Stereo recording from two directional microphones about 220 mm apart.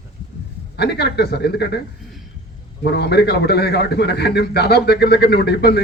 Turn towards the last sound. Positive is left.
turn(degrees=45)  # may be behind; listen again after turning